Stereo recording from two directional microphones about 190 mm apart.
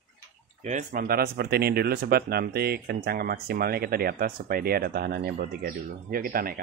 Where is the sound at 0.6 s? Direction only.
40° right (ahead or behind).